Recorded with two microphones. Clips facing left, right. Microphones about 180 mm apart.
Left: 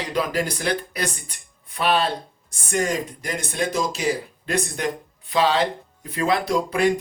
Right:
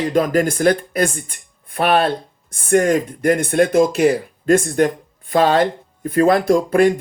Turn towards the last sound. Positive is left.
turn(degrees=-50)  # may be behind; listen again after turning